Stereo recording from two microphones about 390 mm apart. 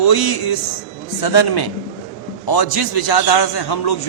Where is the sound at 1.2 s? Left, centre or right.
Left.